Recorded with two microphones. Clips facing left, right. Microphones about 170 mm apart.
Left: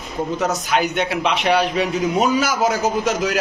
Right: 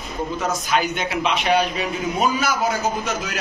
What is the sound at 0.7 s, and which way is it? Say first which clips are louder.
A man's voice: left 2 dB; 65° left (ahead or behind).